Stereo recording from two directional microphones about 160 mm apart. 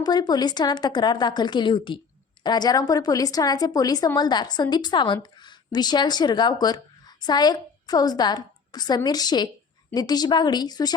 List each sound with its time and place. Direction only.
0.0 s a woman's voice: 25° left (ahead or behind)